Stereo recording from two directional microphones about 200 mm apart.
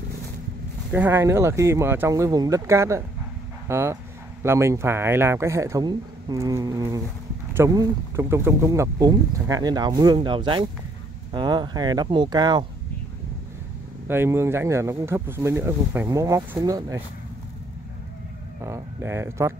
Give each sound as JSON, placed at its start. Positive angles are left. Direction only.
{"t": 0.9, "sound": "speech", "side_deg": -10}
{"t": 14.0, "sound": "speech", "side_deg": -10}
{"t": 18.6, "sound": "speech", "side_deg": -15}